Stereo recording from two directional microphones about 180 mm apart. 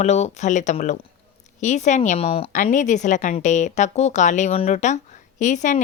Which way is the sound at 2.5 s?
45° left (ahead or behind).